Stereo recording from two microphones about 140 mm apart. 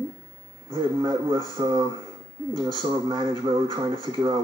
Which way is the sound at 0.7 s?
30° right (ahead or behind).